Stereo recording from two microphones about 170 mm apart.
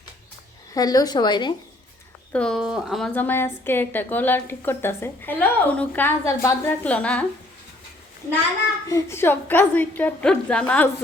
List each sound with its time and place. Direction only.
0.7 s speech: 20° left (ahead or behind)
2.3 s speech: 5° left (ahead or behind)
3.2 s a woman's voice: 10° left (ahead or behind)
8.9 s a woman's voice: 15° left (ahead or behind)